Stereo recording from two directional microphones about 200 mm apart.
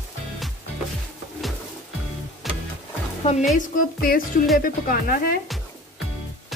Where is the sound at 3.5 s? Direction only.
40° left (ahead or behind).